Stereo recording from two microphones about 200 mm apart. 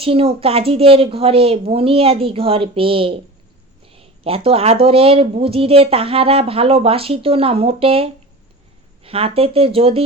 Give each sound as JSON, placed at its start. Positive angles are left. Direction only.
{"t": 0.0, "sound": "speech", "side_deg": -30}